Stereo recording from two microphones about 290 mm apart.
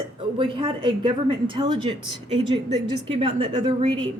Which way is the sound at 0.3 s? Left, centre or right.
Centre.